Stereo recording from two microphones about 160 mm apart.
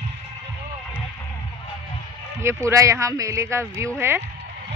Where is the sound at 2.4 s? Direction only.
20° right (ahead or behind).